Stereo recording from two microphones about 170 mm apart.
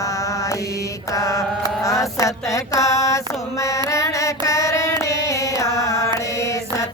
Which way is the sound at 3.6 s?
20° left (ahead or behind).